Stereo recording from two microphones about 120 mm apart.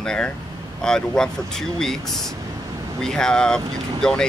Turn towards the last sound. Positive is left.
turn(degrees=5)  # may be behind; listen again after turning